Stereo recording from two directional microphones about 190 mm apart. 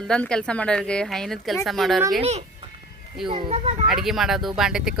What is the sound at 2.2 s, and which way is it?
Speech, 35° right (ahead or behind).